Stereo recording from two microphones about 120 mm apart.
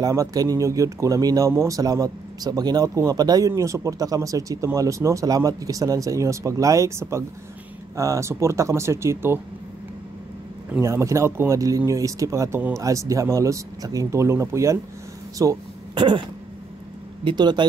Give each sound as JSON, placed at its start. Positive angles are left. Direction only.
{"t": 0.0, "sound": "speech", "side_deg": -30}
{"t": 10.8, "sound": "speech", "side_deg": -25}
{"t": 15.3, "sound": "a sound", "side_deg": -30}
{"t": 16.0, "sound": "speech", "side_deg": -40}